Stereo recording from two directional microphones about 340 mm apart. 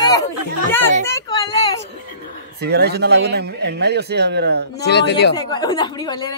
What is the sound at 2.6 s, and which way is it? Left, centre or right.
Speech, right.